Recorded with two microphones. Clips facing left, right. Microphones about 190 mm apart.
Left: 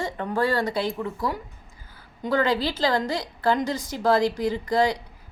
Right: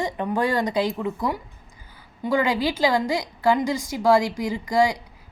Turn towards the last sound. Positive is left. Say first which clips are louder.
# right 1 dB
turn(degrees=-10)  # may be behind; listen again after turning